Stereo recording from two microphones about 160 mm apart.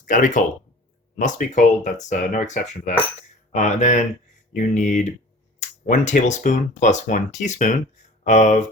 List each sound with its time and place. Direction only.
0.0 s speech: 55° left (ahead or behind)